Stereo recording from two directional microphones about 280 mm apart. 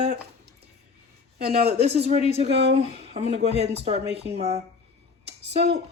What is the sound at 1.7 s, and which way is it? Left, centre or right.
Speech, right.